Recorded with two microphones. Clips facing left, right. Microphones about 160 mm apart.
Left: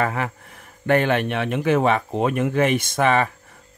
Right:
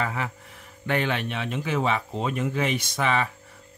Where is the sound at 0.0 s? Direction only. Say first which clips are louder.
Left 5 dB; 55° left (ahead or behind).